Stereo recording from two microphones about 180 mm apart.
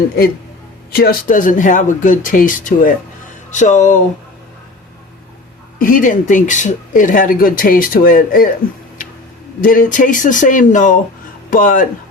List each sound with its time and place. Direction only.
0.9 s speech: 50° left (ahead or behind)
5.8 s speech: 45° left (ahead or behind)
9.6 s speech: 50° left (ahead or behind)